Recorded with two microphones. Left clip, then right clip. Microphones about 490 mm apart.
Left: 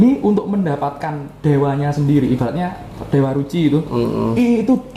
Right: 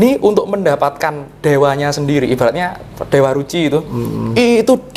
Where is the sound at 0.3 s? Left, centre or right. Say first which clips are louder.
Right 7 dB; right.